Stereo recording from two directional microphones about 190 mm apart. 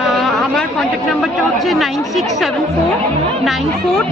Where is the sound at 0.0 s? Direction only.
Centre (ahead or behind).